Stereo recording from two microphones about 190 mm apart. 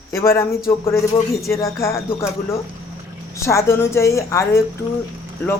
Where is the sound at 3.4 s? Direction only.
15° left (ahead or behind).